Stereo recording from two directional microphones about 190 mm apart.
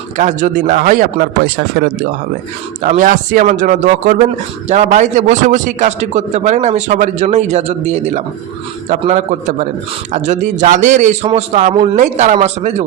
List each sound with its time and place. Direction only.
0.2 s a man's voice: 40° right (ahead or behind)
2.8 s a man's voice: 40° right (ahead or behind)